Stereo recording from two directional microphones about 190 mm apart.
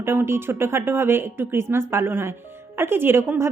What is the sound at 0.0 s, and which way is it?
A woman's voice, 15° right (ahead or behind).